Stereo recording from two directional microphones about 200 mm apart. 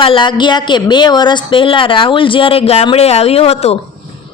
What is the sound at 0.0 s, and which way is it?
Speech, 25° left (ahead or behind).